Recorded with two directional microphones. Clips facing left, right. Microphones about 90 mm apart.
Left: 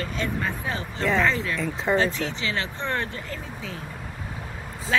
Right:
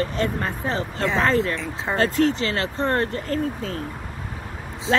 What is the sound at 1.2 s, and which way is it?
Speech, 40° right (ahead or behind).